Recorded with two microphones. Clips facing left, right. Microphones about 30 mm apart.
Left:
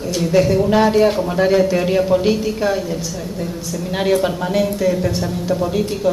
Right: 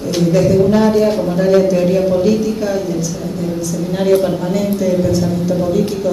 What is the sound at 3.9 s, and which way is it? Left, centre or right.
Speech, left.